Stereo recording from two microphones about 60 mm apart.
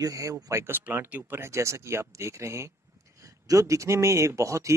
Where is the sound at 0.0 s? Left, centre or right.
Right.